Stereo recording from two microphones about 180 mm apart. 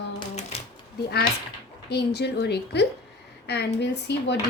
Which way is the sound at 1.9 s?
65° left (ahead or behind).